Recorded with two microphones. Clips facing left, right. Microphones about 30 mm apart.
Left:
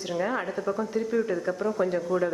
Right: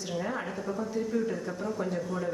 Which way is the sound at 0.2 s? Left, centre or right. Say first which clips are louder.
Left 6 dB; left.